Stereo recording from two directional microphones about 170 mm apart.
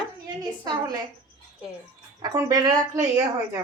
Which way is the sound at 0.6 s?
25° right (ahead or behind).